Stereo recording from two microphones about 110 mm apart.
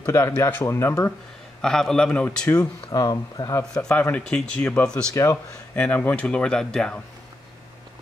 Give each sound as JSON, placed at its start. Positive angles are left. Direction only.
{"t": 0.0, "sound": "speech", "side_deg": 25}
{"t": 1.6, "sound": "speech", "side_deg": 5}
{"t": 2.6, "sound": "speech", "side_deg": 35}
{"t": 3.7, "sound": "speech", "side_deg": 10}
{"t": 5.1, "sound": "speech", "side_deg": 30}
{"t": 5.8, "sound": "speech", "side_deg": 15}